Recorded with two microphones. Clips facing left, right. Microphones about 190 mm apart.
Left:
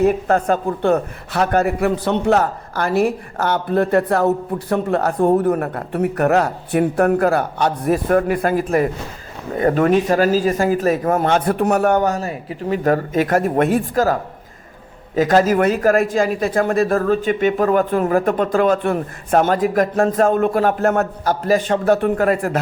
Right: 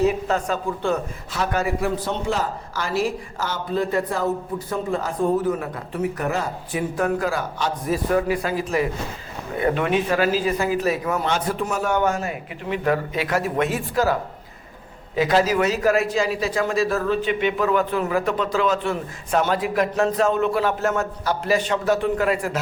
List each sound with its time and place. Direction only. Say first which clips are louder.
0.0 s a man's voice: left 5 dB; 55° left (ahead or behind)
11.9 s a man's voice: left 3 dB; 40° left (ahead or behind); by 21.1 s 60° left (ahead or behind)
21.2 s a man's voice: left 4 dB; 45° left (ahead or behind)